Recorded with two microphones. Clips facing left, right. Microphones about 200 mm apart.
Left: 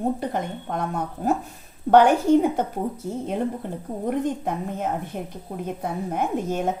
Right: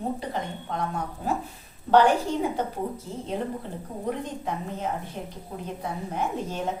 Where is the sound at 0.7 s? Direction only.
50° left (ahead or behind).